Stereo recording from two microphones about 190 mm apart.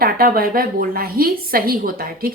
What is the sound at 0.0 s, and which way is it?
A woman's voice, 50° right (ahead or behind).